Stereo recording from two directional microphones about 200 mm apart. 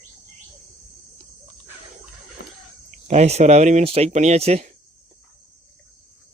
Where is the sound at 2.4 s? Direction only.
50° left (ahead or behind).